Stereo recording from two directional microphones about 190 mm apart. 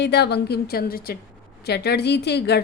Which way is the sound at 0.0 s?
60° left (ahead or behind).